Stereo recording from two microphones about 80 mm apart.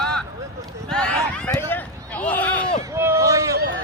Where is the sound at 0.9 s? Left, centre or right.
Centre.